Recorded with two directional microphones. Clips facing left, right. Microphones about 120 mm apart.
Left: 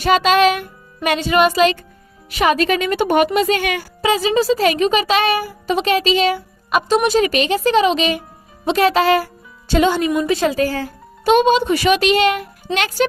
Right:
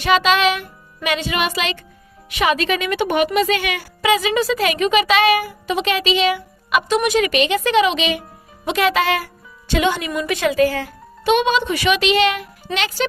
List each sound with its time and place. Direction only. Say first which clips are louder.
0.0 s music: left 2 dB; 45° left (ahead or behind)
1.0 s a woman's voice: left 6 dB; 40° left (ahead or behind)
12.7 s music: left 4 dB; 45° left (ahead or behind)